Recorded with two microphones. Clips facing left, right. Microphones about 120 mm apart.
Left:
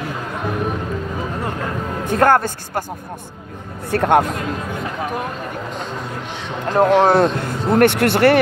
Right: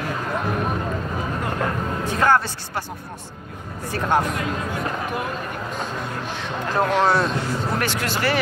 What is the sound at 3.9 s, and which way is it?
Speech, 65° left (ahead or behind).